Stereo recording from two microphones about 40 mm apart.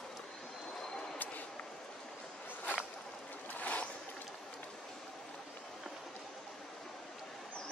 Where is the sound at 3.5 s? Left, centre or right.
Left.